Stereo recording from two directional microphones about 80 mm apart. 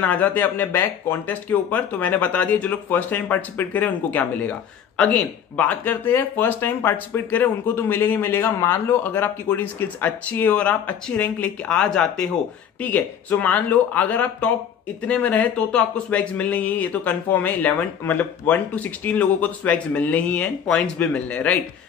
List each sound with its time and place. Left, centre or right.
0.0 s speech: centre